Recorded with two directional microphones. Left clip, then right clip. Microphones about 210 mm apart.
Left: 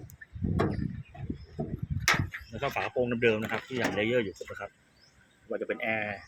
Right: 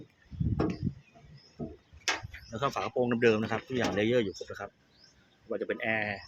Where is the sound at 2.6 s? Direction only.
20° right (ahead or behind).